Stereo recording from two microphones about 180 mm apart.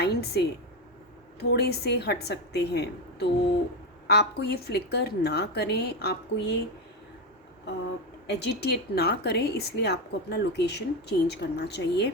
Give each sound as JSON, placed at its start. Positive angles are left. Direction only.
{"t": 0.0, "sound": "a sound", "side_deg": 65}
{"t": 1.4, "sound": "a woman's voice", "side_deg": 65}
{"t": 8.3, "sound": "a woman's voice", "side_deg": 65}